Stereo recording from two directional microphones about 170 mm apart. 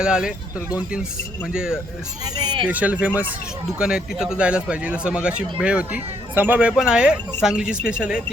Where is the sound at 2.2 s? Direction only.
25° right (ahead or behind).